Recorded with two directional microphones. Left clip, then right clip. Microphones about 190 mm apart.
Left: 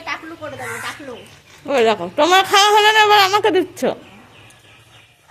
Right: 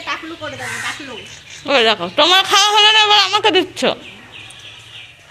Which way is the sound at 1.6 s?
5° left (ahead or behind).